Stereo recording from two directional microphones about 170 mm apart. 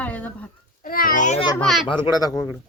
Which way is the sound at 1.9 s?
20° left (ahead or behind).